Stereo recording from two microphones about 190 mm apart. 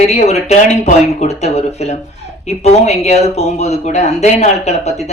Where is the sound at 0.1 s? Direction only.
35° left (ahead or behind).